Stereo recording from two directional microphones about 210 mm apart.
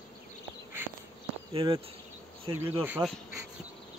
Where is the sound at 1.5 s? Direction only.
25° right (ahead or behind).